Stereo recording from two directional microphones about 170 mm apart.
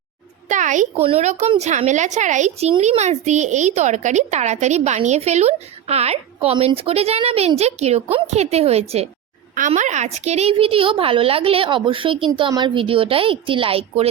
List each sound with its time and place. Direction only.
0.4 s a child's voice: 45° right (ahead or behind)